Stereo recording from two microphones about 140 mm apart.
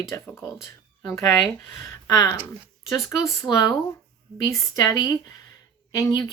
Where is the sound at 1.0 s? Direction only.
20° left (ahead or behind).